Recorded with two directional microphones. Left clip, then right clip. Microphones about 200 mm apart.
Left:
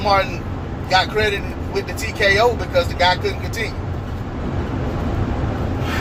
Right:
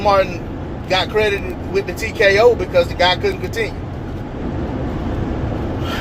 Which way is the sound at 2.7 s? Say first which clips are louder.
Right 2 dB; 35° right (ahead or behind).